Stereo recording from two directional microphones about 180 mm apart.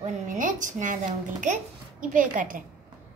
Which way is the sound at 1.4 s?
45° right (ahead or behind).